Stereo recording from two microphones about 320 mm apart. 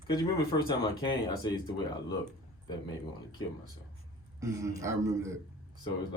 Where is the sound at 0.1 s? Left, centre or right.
Centre.